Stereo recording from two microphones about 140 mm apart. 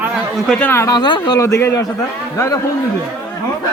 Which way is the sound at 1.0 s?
35° left (ahead or behind).